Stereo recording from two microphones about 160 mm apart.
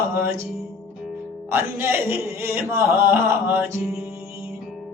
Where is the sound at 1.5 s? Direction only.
15° right (ahead or behind).